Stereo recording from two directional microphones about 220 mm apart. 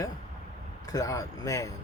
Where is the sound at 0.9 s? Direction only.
15° left (ahead or behind).